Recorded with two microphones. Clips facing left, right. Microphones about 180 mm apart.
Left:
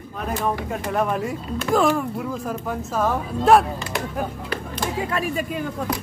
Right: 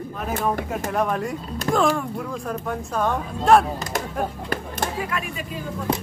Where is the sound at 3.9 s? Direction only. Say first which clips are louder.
Left 1 dB; 40° right (ahead or behind).